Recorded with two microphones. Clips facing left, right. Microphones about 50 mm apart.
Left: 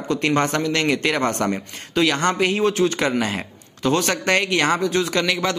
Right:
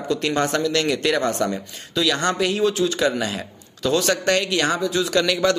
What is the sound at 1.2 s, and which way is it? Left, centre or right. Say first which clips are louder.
Speech: left 1 dB; left.